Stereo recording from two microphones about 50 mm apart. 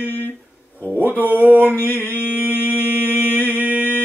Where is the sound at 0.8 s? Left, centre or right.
Right.